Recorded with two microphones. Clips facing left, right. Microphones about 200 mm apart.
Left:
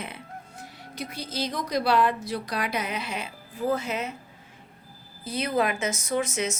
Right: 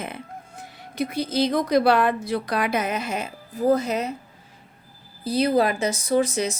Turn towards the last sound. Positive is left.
turn(degrees=-35)  # may be behind; listen again after turning